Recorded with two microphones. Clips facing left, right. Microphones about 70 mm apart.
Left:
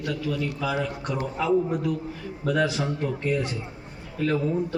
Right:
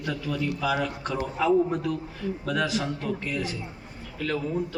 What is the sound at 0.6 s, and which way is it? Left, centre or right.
A man's voice, centre.